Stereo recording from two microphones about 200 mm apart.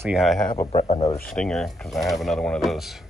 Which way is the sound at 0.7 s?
30° left (ahead or behind).